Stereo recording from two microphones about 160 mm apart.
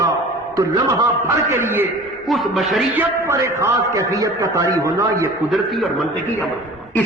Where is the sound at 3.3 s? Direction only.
20° right (ahead or behind).